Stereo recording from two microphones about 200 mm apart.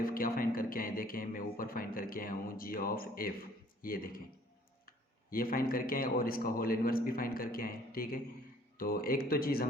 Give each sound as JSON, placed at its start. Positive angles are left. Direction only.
{"t": 0.0, "sound": "a man's voice", "side_deg": 45}
{"t": 5.3, "sound": "a man's voice", "side_deg": 45}